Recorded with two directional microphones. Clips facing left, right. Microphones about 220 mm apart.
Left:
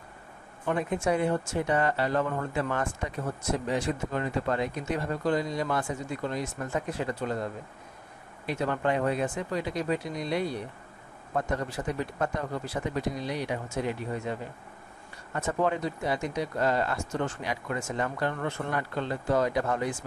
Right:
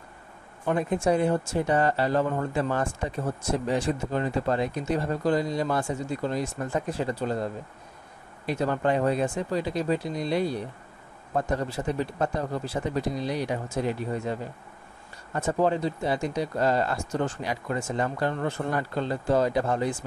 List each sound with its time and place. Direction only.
0.7 s speech: 35° right (ahead or behind)
8.5 s speech: 35° right (ahead or behind)
15.3 s speech: 30° right (ahead or behind)